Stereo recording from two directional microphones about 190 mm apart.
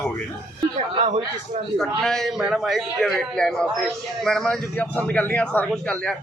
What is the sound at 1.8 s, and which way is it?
A man's voice, centre (ahead or behind).